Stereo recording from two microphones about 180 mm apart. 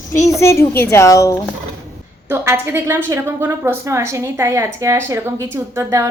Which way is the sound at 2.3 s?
15° right (ahead or behind).